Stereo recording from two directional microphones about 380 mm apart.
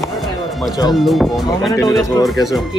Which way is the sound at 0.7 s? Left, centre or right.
Centre.